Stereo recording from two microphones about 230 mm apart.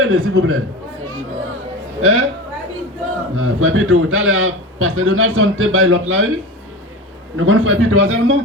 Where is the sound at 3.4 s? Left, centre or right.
Right.